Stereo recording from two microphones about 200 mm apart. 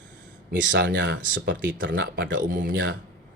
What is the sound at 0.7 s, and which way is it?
Speech, 65° right (ahead or behind).